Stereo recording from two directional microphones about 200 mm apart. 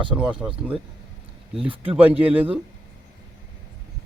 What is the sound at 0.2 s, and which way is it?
Speech, 5° right (ahead or behind).